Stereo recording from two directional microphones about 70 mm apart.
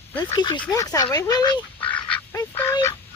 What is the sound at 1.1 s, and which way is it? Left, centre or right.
Speech, left.